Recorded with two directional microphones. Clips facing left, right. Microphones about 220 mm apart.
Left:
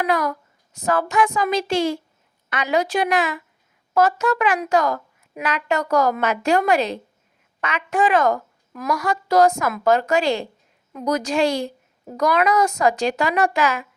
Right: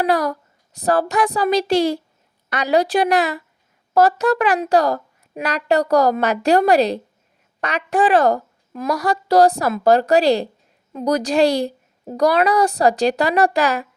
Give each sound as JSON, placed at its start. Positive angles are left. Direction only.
{"t": 0.0, "sound": "a woman's voice", "side_deg": -35}